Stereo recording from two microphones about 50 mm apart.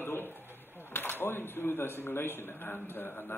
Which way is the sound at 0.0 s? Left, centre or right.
Left.